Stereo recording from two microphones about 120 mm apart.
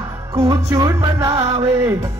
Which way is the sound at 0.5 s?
30° right (ahead or behind).